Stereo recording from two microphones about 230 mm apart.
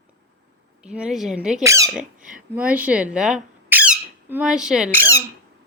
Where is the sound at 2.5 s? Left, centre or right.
Centre.